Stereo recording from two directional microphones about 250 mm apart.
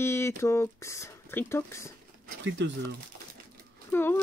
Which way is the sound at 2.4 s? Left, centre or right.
Right.